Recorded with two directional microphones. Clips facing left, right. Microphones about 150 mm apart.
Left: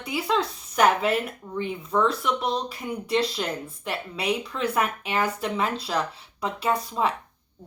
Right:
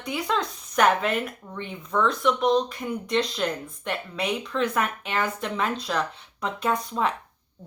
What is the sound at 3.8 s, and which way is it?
Speech, 5° left (ahead or behind).